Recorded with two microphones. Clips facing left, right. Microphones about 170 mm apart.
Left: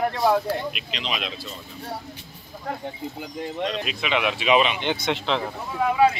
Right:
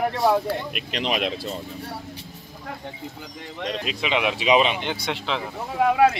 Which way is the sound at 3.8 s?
25° right (ahead or behind).